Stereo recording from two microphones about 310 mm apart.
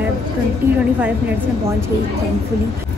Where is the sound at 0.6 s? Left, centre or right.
Centre.